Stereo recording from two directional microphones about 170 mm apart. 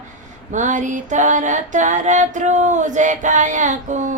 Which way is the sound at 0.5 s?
45° right (ahead or behind).